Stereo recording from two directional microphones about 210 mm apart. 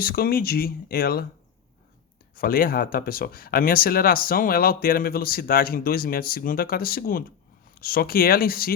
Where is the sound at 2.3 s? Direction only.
45° left (ahead or behind).